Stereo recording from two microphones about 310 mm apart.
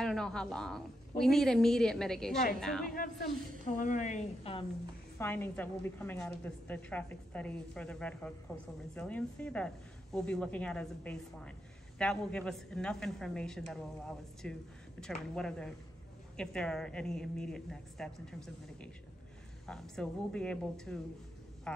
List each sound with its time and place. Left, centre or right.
0.0 s a woman's voice: centre
3.8 s a woman's voice: left
5.2 s a woman's voice: centre